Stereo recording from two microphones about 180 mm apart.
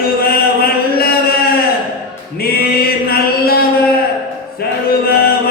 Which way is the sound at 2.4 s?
55° left (ahead or behind).